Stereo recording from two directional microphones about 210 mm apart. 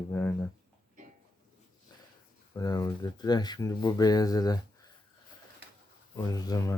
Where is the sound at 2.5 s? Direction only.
15° left (ahead or behind).